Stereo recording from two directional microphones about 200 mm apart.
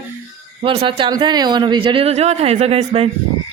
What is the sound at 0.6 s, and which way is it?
Speech, 30° right (ahead or behind).